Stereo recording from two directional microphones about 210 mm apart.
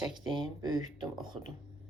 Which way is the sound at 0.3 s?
20° right (ahead or behind).